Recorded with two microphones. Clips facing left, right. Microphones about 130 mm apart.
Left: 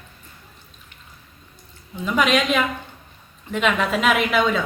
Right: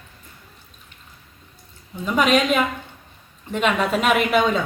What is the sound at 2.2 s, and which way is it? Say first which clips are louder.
Speech: right 2 dB; 45° right (ahead or behind).